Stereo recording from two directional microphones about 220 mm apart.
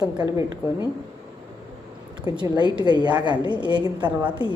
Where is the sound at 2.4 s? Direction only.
20° right (ahead or behind).